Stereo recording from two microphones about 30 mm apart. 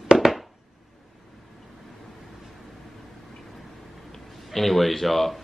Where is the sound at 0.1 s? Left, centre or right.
Centre.